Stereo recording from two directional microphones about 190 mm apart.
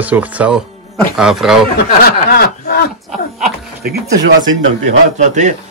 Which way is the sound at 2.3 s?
55° left (ahead or behind).